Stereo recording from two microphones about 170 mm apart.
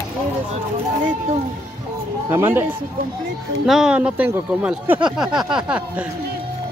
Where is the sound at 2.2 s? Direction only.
15° right (ahead or behind).